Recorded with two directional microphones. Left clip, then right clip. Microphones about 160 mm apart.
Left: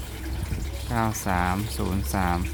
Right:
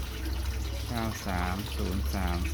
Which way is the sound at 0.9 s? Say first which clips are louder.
Left 9 dB; 45° left (ahead or behind).